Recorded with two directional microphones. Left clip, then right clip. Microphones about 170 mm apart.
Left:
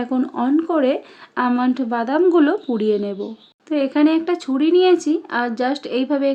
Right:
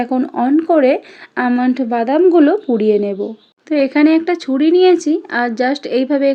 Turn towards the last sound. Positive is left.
turn(degrees=-15)  # may be behind; listen again after turning